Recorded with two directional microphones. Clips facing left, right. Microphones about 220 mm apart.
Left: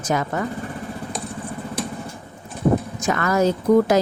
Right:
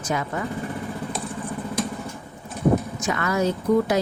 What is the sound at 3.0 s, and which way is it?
Speech, 45° left (ahead or behind).